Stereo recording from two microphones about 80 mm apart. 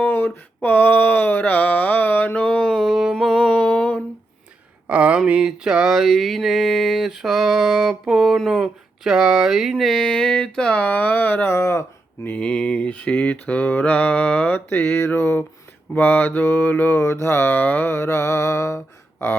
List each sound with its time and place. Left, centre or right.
0.0 s a sound: left
0.6 s mantra: left
2.7 s a sound: centre
3.3 s mantra: centre
4.9 s mantra: centre; by 12.3 s left
12.3 s mantra: centre
17.9 s music: left